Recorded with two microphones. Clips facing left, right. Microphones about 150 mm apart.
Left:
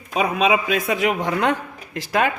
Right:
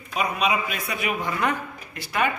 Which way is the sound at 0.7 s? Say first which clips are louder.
Left 8 dB; 90° left.